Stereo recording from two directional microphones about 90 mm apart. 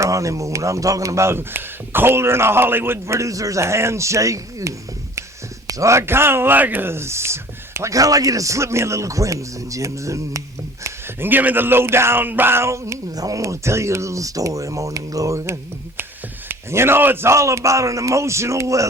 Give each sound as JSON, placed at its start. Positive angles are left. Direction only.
{"t": 0.0, "sound": "speech", "side_deg": -35}
{"t": 10.8, "sound": "speech", "side_deg": -25}